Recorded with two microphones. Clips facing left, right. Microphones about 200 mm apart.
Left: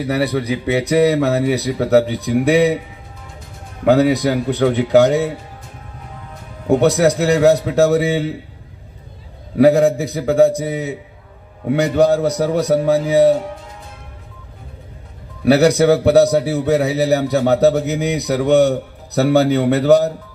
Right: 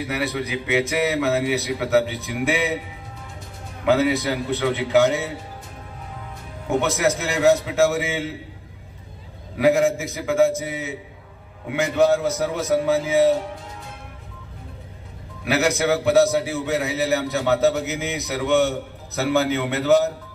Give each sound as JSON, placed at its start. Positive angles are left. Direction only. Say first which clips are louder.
{"t": 0.0, "sound": "a man's voice", "louder": "left 7 dB", "side_deg": 35}
{"t": 3.8, "sound": "a man's voice", "louder": "left 6 dB", "side_deg": 40}
{"t": 7.0, "sound": "a man's voice", "louder": "left 8 dB", "side_deg": 35}
{"t": 9.6, "sound": "a man's voice", "louder": "left 6 dB", "side_deg": 40}
{"t": 15.4, "sound": "a man's voice", "louder": "left 9 dB", "side_deg": 35}